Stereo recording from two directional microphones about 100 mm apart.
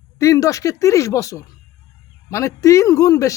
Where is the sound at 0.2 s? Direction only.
30° left (ahead or behind).